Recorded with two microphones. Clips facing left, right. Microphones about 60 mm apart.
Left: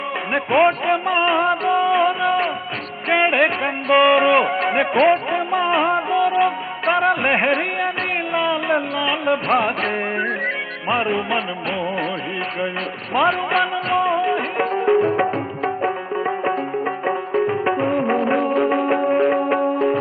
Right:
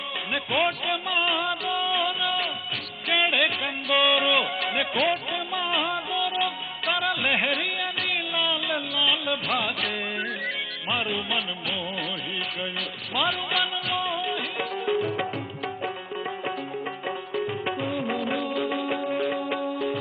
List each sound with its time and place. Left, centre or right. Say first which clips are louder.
0.3 s music: left 10 dB; left
7.4 s speech: left 8 dB; left
10.9 s music: left 9 dB; left
13.1 s music: left 9 dB; left
16.2 s music: left 10 dB; left
17.1 s music: left 9 dB; left